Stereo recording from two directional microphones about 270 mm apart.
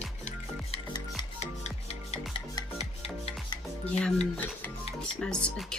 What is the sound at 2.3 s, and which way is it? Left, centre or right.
Music, left.